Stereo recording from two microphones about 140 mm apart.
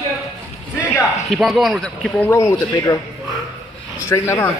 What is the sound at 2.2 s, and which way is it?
Speech, 20° left (ahead or behind).